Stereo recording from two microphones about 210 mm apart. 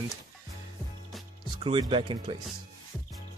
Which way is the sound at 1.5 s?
25° right (ahead or behind).